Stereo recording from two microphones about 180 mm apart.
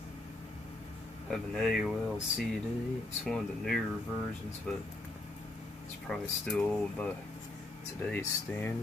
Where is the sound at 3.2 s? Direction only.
Centre (ahead or behind).